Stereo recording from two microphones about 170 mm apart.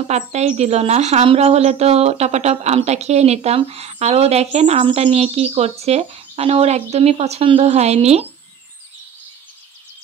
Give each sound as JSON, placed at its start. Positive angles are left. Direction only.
{"t": 0.1, "sound": "speech", "side_deg": -40}